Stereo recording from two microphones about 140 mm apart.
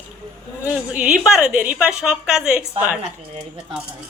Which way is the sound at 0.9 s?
5° right (ahead or behind).